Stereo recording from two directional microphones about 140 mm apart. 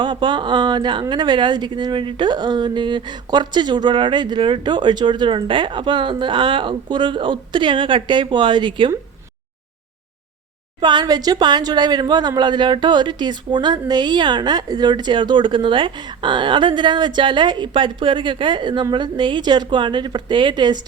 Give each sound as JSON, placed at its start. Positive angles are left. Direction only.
{"t": 0.0, "sound": "speech", "side_deg": -35}
{"t": 10.8, "sound": "speech", "side_deg": -35}